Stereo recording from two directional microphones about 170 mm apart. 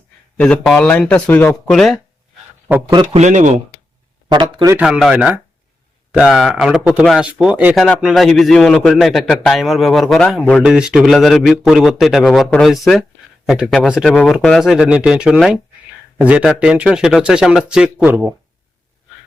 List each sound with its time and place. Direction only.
0.3 s speech: 5° left (ahead or behind)
2.7 s a man's voice: 10° right (ahead or behind)
3.1 s speech: 40° right (ahead or behind)
4.3 s a man's voice: 25° right (ahead or behind)
4.7 s speech: 5° right (ahead or behind)